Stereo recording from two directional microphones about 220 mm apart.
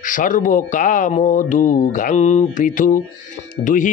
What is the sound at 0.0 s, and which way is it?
Speech, 35° left (ahead or behind).